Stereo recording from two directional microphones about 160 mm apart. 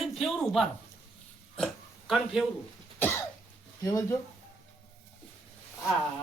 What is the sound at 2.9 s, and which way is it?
Cough, 10° left (ahead or behind).